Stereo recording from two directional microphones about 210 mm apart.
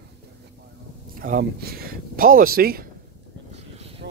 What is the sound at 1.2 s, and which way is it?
Speech, 45° right (ahead or behind).